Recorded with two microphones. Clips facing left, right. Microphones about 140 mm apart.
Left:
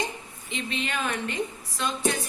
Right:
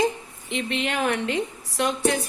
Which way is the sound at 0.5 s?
75° right (ahead or behind).